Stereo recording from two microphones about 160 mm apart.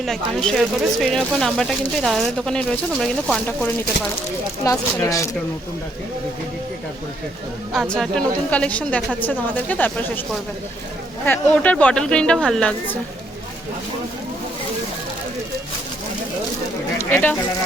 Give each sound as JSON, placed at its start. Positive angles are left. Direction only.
{"t": 0.0, "sound": "speech", "side_deg": 5}
{"t": 4.6, "sound": "speech", "side_deg": 20}
{"t": 7.7, "sound": "a woman's voice", "side_deg": 0}
{"t": 11.3, "sound": "a woman's voice", "side_deg": 10}
{"t": 17.0, "sound": "speech", "side_deg": 10}